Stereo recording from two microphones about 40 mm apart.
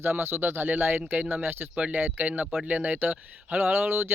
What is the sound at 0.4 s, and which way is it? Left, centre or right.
Speech, right.